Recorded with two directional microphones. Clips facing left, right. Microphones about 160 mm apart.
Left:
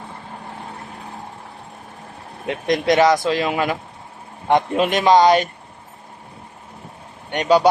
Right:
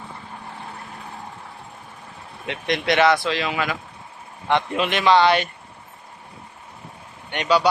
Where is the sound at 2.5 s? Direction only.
40° left (ahead or behind).